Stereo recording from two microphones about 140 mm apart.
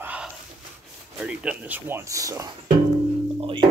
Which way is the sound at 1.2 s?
10° right (ahead or behind).